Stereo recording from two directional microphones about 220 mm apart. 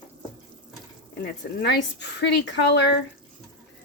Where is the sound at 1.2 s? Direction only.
50° left (ahead or behind).